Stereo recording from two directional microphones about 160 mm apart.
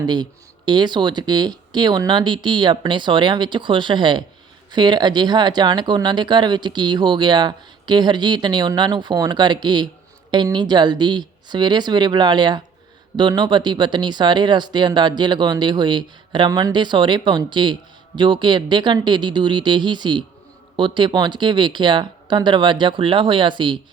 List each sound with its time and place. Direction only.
0.0 s speech: 25° right (ahead or behind)